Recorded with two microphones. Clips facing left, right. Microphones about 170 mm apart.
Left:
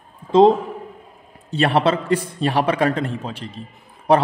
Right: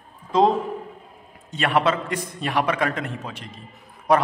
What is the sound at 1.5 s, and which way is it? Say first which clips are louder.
A man's voice: left 4 dB; 30° left (ahead or behind).